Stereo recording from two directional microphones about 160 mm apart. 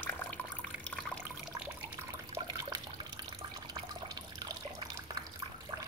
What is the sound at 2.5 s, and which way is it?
Water, 20° right (ahead or behind).